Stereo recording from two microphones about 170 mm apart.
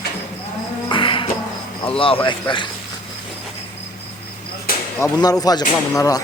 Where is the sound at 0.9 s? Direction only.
30° left (ahead or behind).